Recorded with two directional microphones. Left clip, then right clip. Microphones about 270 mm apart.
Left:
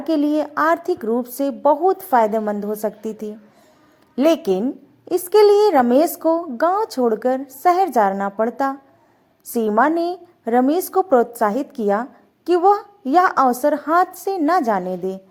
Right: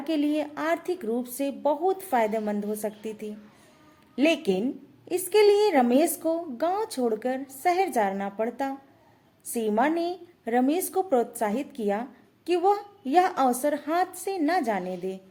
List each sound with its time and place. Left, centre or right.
0.0 s a woman's voice: left
2.8 s a woman's voice: left
6.7 s speech: centre
7.0 s a woman's voice: centre